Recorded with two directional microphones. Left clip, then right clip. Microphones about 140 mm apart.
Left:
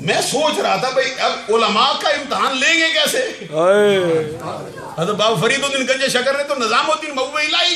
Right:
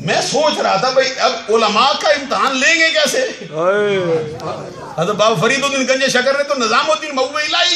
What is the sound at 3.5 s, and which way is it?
Speech, 70° left (ahead or behind).